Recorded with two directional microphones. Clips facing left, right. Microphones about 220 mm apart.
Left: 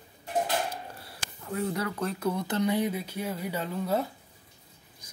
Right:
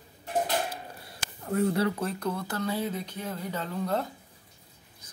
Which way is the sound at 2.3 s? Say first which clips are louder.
Left 7 dB; 20° left (ahead or behind).